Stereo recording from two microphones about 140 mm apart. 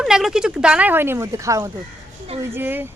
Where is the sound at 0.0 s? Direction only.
5° right (ahead or behind).